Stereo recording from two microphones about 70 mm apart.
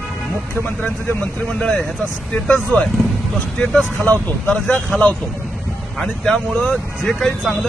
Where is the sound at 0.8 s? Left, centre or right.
Centre.